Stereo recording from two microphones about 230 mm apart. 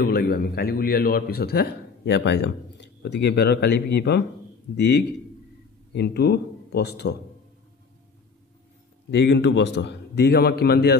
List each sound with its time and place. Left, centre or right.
0.0 s a man's voice: left
9.1 s a man's voice: left